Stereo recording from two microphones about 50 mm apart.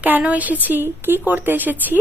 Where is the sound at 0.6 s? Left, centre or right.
Right.